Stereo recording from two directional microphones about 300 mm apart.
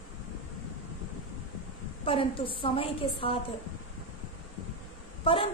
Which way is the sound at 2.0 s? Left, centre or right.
Centre.